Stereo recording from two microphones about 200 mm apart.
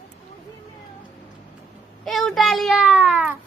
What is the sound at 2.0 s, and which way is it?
A child's voice, centre (ahead or behind).